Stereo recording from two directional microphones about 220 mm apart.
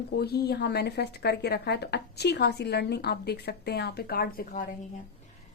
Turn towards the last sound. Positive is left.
turn(degrees=40)  # may be behind; listen again after turning